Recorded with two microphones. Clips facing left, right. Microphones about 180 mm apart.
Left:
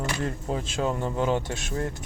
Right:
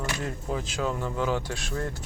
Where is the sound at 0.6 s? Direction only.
25° left (ahead or behind).